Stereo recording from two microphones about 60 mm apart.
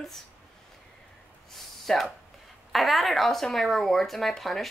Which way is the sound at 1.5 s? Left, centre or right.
Centre.